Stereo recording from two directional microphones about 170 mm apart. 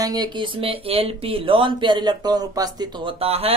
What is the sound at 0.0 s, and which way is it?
Speech, 25° right (ahead or behind).